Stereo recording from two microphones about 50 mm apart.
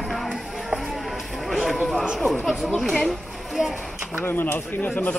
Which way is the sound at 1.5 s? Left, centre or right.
Centre.